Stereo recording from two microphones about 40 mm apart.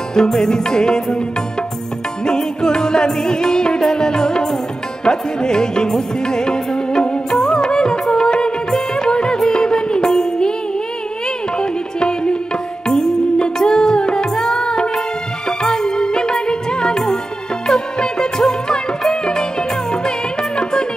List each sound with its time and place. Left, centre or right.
0.1 s music: centre
2.2 s music: centre
11.5 s music: left